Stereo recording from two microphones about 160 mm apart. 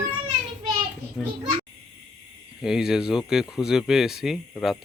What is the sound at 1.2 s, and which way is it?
Speech, 5° left (ahead or behind).